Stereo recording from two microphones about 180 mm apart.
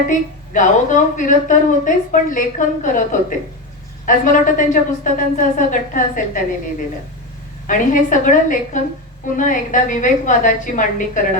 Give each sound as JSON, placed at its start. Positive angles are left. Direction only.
{"t": 0.1, "sound": "a woman's voice", "side_deg": 45}
{"t": 7.7, "sound": "a woman's voice", "side_deg": 45}